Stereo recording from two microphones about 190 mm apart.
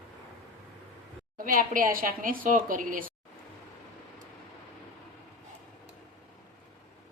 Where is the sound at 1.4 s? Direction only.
45° right (ahead or behind).